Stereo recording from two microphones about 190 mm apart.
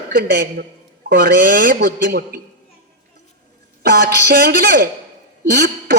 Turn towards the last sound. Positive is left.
turn(degrees=-55)  # may be behind; listen again after turning